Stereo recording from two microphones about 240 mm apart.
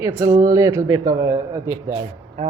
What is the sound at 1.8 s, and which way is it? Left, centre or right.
Speech, right.